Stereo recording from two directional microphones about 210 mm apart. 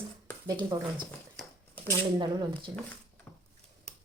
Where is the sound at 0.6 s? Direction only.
20° right (ahead or behind).